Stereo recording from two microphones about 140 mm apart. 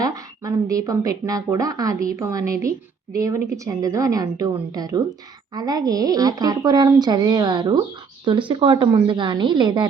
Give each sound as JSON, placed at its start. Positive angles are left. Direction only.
{"t": 0.0, "sound": "a woman's voice", "side_deg": -25}